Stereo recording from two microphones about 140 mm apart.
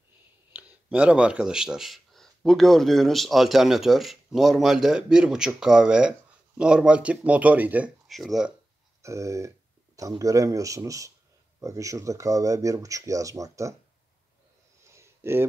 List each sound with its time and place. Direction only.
0.8 s speech: 10° right (ahead or behind)
8.1 s speech: centre (ahead or behind)
9.0 s speech: 20° right (ahead or behind)
15.0 s a sound: 15° right (ahead or behind)